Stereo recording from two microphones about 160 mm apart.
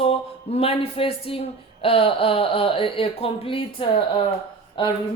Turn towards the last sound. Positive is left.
turn(degrees=30)  # may be behind; listen again after turning